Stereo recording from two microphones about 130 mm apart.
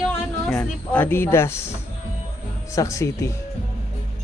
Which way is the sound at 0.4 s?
10° left (ahead or behind).